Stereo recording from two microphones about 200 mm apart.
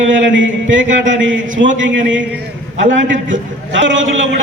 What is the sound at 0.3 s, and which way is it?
Speech, 70° right (ahead or behind).